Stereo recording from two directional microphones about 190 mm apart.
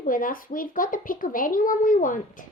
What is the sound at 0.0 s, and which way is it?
A child's voice, 45° left (ahead or behind).